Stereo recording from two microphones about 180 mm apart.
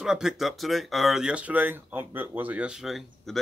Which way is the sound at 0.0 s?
5° right (ahead or behind).